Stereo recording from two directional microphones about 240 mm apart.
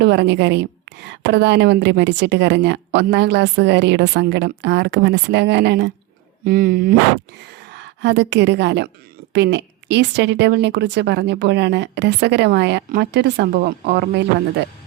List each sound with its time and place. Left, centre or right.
0.0 s a woman's voice: right